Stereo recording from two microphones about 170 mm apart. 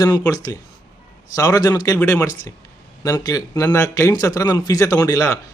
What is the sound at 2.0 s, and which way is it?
Speech, 10° left (ahead or behind).